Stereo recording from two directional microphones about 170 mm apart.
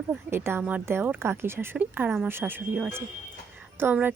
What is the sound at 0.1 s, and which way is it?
A woman's voice, 15° right (ahead or behind).